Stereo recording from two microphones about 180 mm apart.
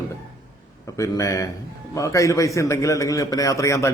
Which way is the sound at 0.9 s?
15° left (ahead or behind).